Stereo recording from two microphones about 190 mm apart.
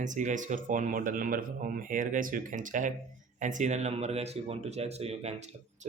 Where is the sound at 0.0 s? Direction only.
40° right (ahead or behind).